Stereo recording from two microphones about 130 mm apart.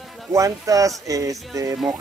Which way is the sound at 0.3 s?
25° right (ahead or behind).